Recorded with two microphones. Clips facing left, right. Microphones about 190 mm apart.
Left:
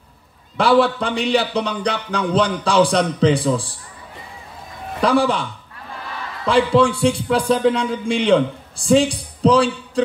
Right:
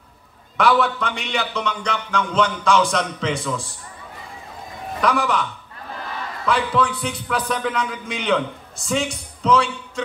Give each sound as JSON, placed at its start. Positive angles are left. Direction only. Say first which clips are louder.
{"t": 0.6, "sound": "a man's voice", "louder": "left 4 dB", "side_deg": 30}
{"t": 5.0, "sound": "a man's voice", "louder": "left 4 dB", "side_deg": 30}